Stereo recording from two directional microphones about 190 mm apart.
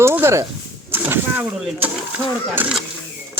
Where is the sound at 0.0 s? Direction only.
15° right (ahead or behind).